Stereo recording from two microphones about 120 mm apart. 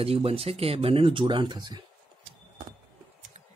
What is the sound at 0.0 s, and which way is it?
Speech, 55° right (ahead or behind).